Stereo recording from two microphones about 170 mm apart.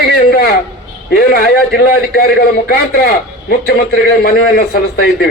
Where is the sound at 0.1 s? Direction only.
65° left (ahead or behind).